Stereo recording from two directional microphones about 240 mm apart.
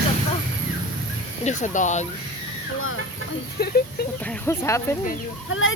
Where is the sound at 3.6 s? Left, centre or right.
Left.